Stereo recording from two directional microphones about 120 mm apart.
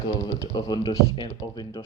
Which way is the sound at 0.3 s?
35° left (ahead or behind).